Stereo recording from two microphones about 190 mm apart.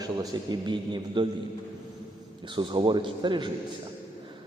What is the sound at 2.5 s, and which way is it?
Speech, 25° right (ahead or behind).